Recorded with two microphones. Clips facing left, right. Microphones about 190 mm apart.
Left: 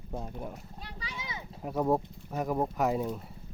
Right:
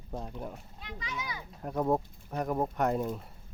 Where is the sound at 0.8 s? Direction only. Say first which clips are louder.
Right 4 dB; 30° left (ahead or behind).